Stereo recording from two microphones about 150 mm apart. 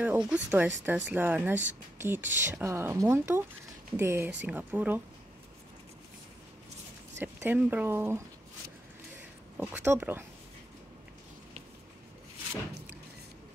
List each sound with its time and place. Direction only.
0.0 s speech: 10° right (ahead or behind)
7.2 s speech: 15° right (ahead or behind)
9.6 s speech: 15° right (ahead or behind)